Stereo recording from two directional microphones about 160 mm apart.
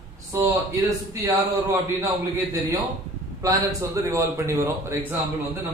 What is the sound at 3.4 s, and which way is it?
A man's voice, 20° right (ahead or behind).